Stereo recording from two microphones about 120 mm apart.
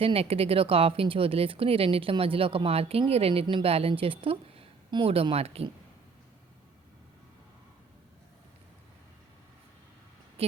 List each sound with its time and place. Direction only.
0.0 s speech: 55° right (ahead or behind)